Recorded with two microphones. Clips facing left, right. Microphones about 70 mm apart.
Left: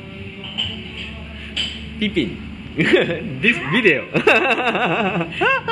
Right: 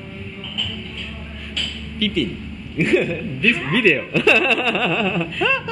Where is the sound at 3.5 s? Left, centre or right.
Centre.